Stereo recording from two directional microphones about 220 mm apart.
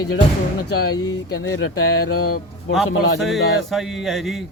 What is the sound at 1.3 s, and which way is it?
Speech, 65° left (ahead or behind).